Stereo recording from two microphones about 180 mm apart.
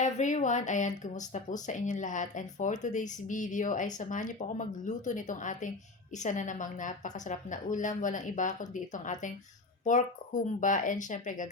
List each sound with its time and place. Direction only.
0.0 s speech: 40° left (ahead or behind)